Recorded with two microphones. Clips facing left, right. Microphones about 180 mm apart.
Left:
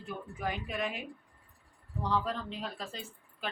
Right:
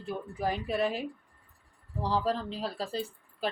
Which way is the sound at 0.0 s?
35° right (ahead or behind).